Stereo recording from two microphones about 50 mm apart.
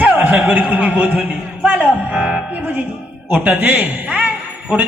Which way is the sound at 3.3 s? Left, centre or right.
Right.